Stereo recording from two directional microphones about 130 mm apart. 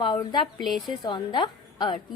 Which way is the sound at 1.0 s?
35° left (ahead or behind).